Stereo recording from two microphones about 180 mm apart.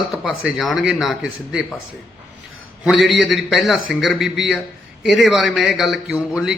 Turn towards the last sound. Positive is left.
turn(degrees=-5)  # may be behind; listen again after turning